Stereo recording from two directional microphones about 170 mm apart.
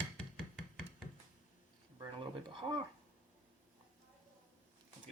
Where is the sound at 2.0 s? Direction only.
30° right (ahead or behind).